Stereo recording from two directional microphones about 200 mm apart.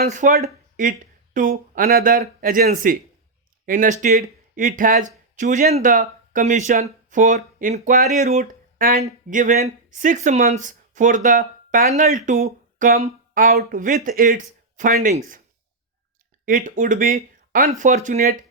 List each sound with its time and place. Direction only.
0.0 s speech: 40° right (ahead or behind)
16.5 s speech: 40° right (ahead or behind)